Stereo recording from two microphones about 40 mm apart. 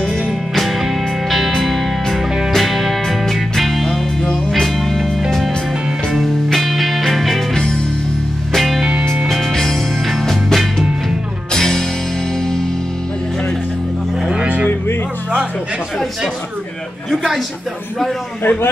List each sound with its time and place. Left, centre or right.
2.0 s music: centre
6.2 s music: centre
8.5 s music: centre
10.2 s music: centre
11.5 s music: centre
17.1 s a sound: centre